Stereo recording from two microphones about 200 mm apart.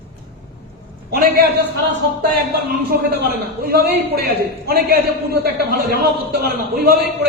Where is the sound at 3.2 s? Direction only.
50° right (ahead or behind).